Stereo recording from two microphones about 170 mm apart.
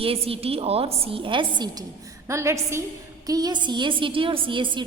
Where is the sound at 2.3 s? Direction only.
15° right (ahead or behind).